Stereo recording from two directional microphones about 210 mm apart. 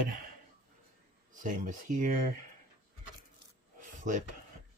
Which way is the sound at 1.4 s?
40° right (ahead or behind).